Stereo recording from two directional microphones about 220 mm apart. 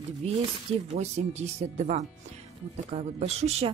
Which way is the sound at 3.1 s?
30° right (ahead or behind).